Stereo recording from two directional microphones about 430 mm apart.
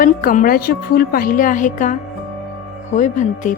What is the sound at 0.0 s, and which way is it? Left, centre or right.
A woman's voice, centre.